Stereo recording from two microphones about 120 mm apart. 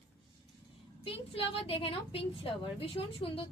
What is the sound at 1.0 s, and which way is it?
A woman's voice, 50° left (ahead or behind).